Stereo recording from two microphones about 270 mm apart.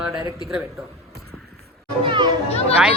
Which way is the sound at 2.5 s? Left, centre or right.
Left.